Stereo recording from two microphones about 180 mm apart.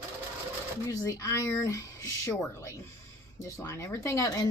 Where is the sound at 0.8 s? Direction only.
20° left (ahead or behind).